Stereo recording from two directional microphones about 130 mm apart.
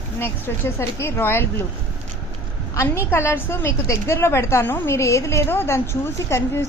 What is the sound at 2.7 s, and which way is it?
A woman's voice, 20° left (ahead or behind).